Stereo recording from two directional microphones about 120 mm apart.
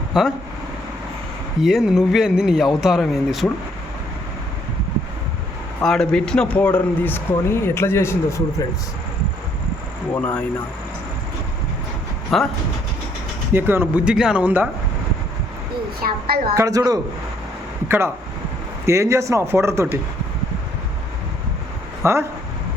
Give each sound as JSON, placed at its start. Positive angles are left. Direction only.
{"t": 0.1, "sound": "speech", "side_deg": -5}
{"t": 1.6, "sound": "a man's voice", "side_deg": -5}
{"t": 5.8, "sound": "a man's voice", "side_deg": 5}
{"t": 10.2, "sound": "speech", "side_deg": 10}
{"t": 12.3, "sound": "a man's voice", "side_deg": 0}
{"t": 13.5, "sound": "speech", "side_deg": -15}
{"t": 16.6, "sound": "speech", "side_deg": -30}
{"t": 22.0, "sound": "speech", "side_deg": -20}